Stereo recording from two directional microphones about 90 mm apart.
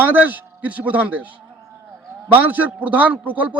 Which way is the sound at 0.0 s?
20° right (ahead or behind).